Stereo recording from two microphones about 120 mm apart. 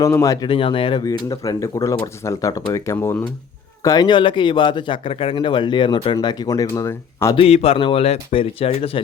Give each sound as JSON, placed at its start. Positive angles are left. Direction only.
{"t": 0.0, "sound": "speech", "side_deg": 30}
{"t": 0.4, "sound": "speech", "side_deg": 45}
{"t": 1.0, "sound": "speech", "side_deg": 30}
{"t": 3.8, "sound": "a man's voice", "side_deg": 35}
{"t": 7.3, "sound": "speech", "side_deg": 55}